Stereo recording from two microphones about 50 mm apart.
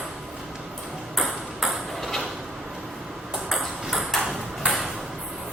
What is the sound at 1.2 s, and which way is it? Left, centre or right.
Ping, centre.